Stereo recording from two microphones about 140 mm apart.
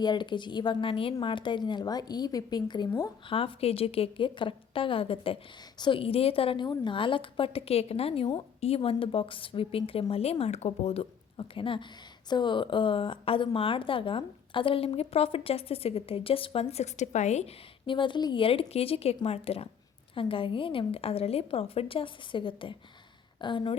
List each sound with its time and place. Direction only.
0.0 s a woman's voice: 30° left (ahead or behind); by 17.5 s 55° left (ahead or behind)
17.8 s a woman's voice: 35° left (ahead or behind)